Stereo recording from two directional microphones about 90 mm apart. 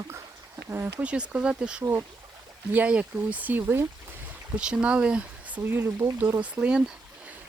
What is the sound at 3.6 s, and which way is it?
Speech, 30° right (ahead or behind).